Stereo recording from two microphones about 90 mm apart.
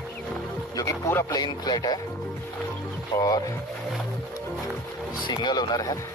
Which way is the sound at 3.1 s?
45° left (ahead or behind).